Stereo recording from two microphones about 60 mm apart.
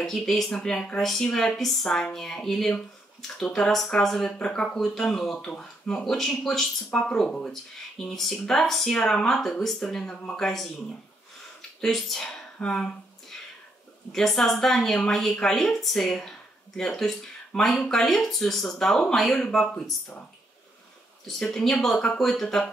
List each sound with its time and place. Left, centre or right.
0.0 s a woman's voice: centre
11.8 s a woman's voice: centre
14.1 s a woman's voice: centre
21.4 s a woman's voice: centre